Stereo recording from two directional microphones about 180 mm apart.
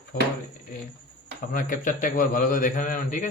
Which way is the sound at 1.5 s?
50° left (ahead or behind).